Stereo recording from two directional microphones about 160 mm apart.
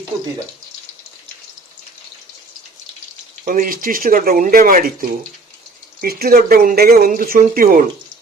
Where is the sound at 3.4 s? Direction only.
60° right (ahead or behind).